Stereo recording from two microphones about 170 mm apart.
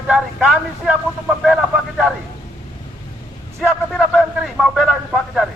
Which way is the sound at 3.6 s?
Centre (ahead or behind).